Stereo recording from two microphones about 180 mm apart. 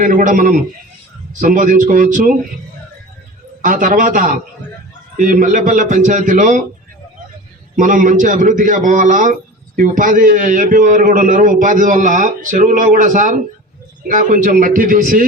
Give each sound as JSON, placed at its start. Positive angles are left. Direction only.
{"t": 0.0, "sound": "a man's voice", "side_deg": -50}
{"t": 3.6, "sound": "a man's voice", "side_deg": -50}
{"t": 7.8, "sound": "a man's voice", "side_deg": -45}